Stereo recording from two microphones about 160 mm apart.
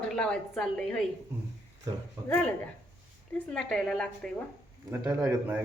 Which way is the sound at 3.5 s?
5° left (ahead or behind).